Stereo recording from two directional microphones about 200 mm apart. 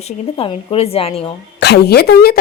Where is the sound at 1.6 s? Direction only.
55° left (ahead or behind).